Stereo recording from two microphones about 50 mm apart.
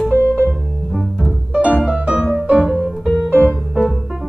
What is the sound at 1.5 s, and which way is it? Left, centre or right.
Music, right.